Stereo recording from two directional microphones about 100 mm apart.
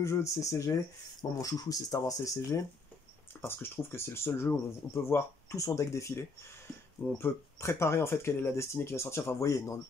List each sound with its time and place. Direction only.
0.0 s speech: 30° left (ahead or behind)